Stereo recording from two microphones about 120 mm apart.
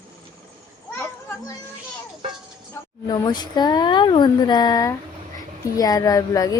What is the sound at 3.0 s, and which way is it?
A woman's voice, 35° left (ahead or behind).